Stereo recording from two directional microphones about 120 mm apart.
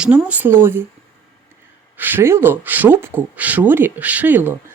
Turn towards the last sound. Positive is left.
turn(degrees=-15)  # may be behind; listen again after turning